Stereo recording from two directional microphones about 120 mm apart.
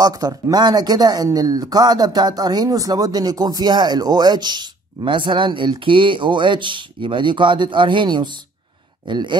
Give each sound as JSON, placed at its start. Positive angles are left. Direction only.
{"t": 0.0, "sound": "speech", "side_deg": -30}